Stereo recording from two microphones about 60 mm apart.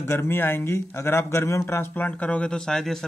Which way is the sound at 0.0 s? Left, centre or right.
Left.